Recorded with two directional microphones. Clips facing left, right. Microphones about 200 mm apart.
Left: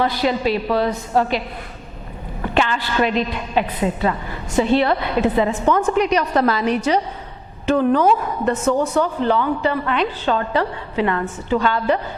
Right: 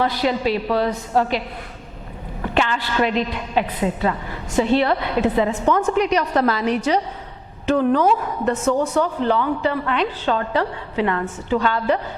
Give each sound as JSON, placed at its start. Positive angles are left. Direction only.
{"t": 0.0, "sound": "a woman's voice", "side_deg": 10}
{"t": 2.6, "sound": "a woman's voice", "side_deg": 10}
{"t": 8.8, "sound": "a woman's voice", "side_deg": 10}